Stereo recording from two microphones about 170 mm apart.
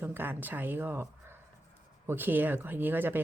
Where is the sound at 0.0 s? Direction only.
10° right (ahead or behind).